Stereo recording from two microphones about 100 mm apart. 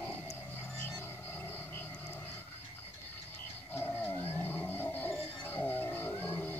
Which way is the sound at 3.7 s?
20° left (ahead or behind).